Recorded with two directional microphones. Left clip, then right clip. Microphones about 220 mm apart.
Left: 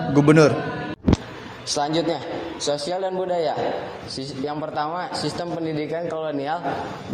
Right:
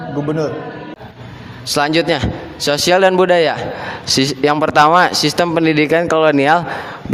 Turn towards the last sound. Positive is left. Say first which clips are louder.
# right 14 dB
turn(degrees=-45)  # may be behind; listen again after turning